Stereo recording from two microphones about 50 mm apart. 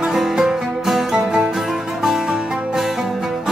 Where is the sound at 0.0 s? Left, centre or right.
Centre.